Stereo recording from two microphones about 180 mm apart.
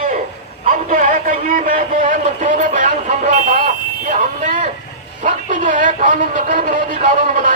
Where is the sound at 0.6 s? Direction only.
45° right (ahead or behind).